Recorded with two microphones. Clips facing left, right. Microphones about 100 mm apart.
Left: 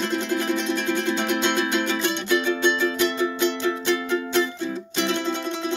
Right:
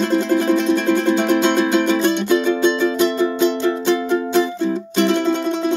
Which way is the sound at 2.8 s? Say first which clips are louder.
Right 6 dB; 25° right (ahead or behind).